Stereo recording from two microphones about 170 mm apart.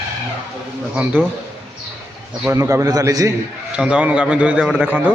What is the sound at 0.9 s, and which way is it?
Speech, 10° right (ahead or behind).